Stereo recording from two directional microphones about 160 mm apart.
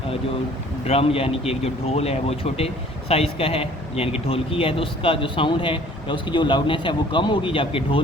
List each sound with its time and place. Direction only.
0.9 s speech: 35° left (ahead or behind)